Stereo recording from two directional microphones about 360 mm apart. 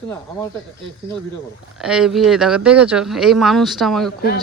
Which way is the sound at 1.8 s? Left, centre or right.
Centre.